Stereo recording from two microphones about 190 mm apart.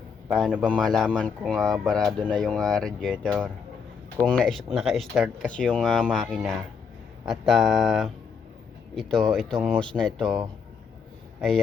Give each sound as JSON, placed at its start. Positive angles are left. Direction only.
{"t": 0.3, "sound": "speech", "side_deg": 0}